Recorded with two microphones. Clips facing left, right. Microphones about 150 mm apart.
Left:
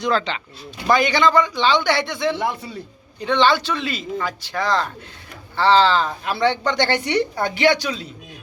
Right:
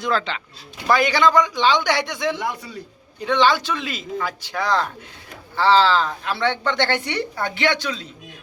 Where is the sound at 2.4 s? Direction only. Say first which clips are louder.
Left 3 dB; 30° left (ahead or behind).